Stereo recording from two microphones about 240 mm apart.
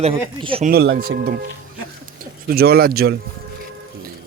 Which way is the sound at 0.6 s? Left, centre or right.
Right.